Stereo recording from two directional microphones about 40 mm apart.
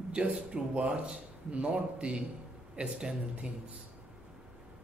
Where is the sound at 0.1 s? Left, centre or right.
Right.